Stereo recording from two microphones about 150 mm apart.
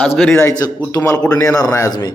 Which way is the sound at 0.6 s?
20° left (ahead or behind).